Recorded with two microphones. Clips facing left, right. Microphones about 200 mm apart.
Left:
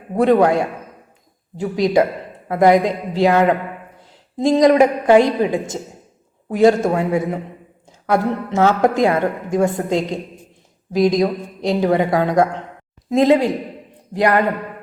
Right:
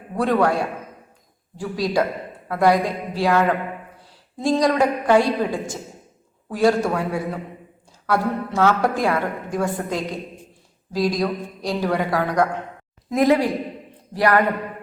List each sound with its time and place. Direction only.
0.1 s a woman's voice: 20° left (ahead or behind)